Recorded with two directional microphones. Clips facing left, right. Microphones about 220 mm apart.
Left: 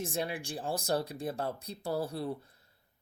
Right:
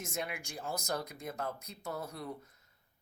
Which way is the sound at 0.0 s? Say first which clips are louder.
Left 5 dB; 30° left (ahead or behind).